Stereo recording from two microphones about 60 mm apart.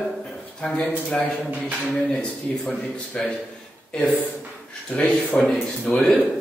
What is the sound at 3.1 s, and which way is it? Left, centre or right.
Speech, centre.